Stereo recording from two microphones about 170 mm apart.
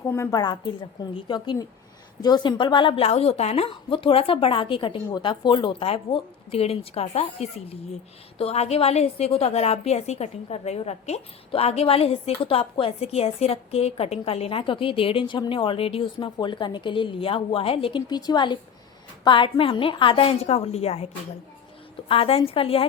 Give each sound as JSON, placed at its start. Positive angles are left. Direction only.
{"t": 0.1, "sound": "a woman's voice", "side_deg": 20}
{"t": 22.1, "sound": "a woman's voice", "side_deg": 35}